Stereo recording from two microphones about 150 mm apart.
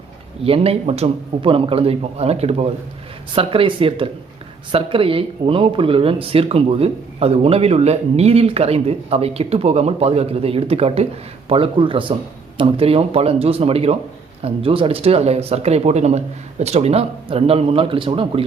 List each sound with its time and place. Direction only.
0.4 s speech: 40° right (ahead or behind)